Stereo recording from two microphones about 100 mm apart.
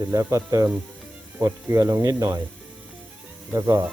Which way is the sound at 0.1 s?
35° right (ahead or behind).